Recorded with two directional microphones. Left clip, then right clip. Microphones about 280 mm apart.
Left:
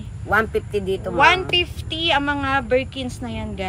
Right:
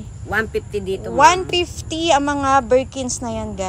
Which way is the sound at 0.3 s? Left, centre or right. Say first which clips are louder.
Left 2 dB; centre.